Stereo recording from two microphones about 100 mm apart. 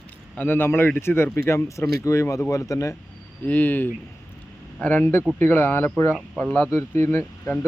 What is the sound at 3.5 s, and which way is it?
A man's voice, 15° left (ahead or behind).